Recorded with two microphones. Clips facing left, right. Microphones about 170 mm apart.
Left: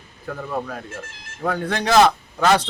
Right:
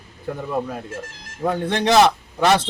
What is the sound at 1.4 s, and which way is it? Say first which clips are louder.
Speech: right 2 dB; 25° right (ahead or behind).